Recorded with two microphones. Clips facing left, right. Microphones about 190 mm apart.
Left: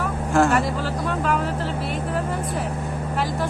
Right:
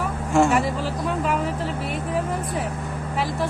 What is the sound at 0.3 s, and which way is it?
Speech, centre (ahead or behind).